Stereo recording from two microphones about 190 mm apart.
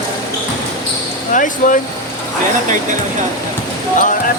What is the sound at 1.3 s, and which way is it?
Speech, 45° left (ahead or behind).